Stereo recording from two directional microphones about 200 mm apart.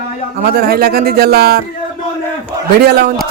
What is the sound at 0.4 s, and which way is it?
Speech, 50° right (ahead or behind).